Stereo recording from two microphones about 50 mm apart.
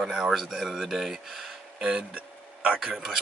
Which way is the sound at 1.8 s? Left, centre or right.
Centre.